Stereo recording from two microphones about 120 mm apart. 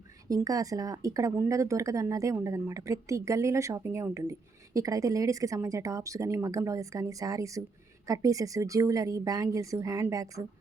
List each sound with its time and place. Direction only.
0.3 s a woman's voice: 30° right (ahead or behind)